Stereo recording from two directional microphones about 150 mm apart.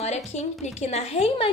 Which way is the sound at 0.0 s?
50° left (ahead or behind).